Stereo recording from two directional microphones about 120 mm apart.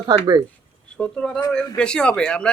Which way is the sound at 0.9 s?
5° left (ahead or behind).